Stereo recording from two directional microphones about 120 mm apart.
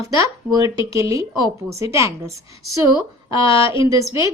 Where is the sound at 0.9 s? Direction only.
25° right (ahead or behind).